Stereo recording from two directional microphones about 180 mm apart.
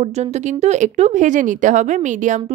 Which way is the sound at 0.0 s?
40° right (ahead or behind).